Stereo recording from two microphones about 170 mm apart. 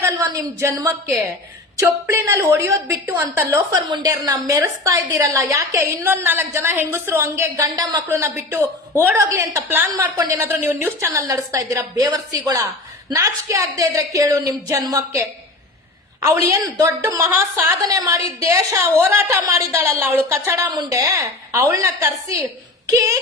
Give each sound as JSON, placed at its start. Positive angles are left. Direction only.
{"t": 0.0, "sound": "a woman's voice", "side_deg": -20}